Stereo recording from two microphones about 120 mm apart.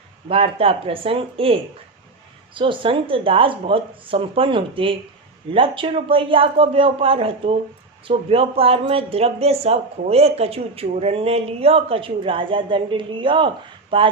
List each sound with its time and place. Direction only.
0.3 s speech: 50° right (ahead or behind)
2.6 s speech: 45° right (ahead or behind)